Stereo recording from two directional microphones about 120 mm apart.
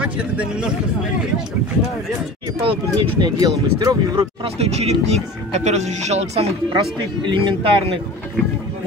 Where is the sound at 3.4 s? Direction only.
30° right (ahead or behind).